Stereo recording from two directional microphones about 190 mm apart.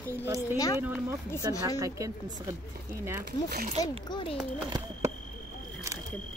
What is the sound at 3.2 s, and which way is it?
Speech, 55° right (ahead or behind).